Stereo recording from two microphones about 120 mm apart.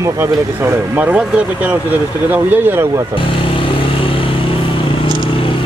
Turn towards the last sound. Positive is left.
turn(degrees=45)  # may be behind; listen again after turning